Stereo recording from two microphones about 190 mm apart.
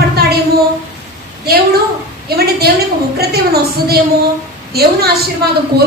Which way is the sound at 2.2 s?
55° right (ahead or behind).